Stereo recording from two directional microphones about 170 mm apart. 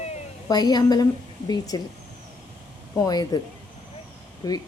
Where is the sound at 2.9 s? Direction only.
20° left (ahead or behind).